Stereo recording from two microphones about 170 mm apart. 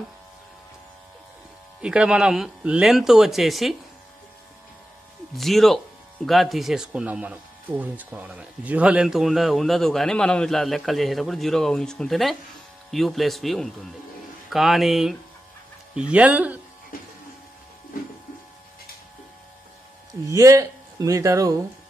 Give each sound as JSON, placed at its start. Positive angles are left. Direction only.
{"t": 1.8, "sound": "speech", "side_deg": -5}
{"t": 5.3, "sound": "speech", "side_deg": 0}
{"t": 20.2, "sound": "speech", "side_deg": -20}